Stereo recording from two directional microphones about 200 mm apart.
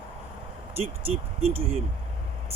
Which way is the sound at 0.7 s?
30° right (ahead or behind).